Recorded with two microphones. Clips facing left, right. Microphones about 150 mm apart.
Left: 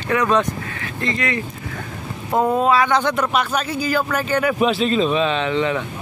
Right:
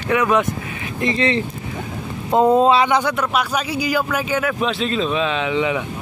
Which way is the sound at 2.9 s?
10° right (ahead or behind).